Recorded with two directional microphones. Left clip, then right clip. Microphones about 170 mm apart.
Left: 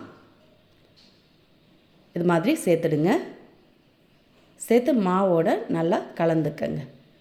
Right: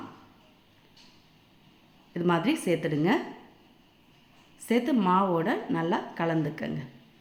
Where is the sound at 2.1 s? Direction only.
25° left (ahead or behind).